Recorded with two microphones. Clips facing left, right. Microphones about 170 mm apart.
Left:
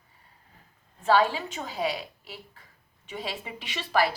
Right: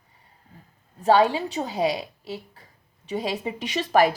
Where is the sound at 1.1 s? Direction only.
15° right (ahead or behind).